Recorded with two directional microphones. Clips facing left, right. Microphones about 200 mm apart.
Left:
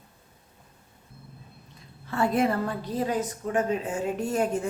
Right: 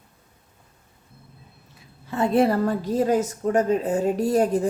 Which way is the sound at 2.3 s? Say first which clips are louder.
Right 9 dB; 35° right (ahead or behind).